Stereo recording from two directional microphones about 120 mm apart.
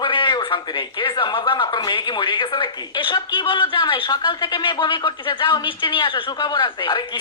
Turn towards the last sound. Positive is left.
turn(degrees=40)  # may be behind; listen again after turning